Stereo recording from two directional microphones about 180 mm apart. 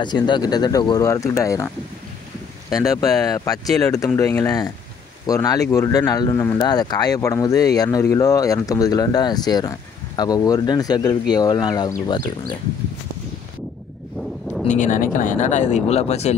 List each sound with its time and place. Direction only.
0.0 s speech: 25° left (ahead or behind)
2.7 s speech: 20° left (ahead or behind)
3.6 s speech: centre (ahead or behind)
3.9 s speech: 20° left (ahead or behind)
14.7 s speech: 45° left (ahead or behind)